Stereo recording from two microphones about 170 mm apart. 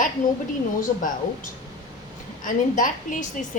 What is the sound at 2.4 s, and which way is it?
Speech, 50° left (ahead or behind).